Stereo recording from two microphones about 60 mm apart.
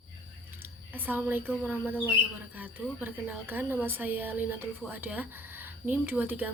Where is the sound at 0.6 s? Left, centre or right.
Right.